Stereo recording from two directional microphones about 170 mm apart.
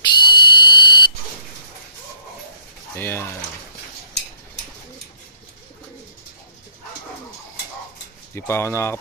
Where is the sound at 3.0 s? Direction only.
15° left (ahead or behind).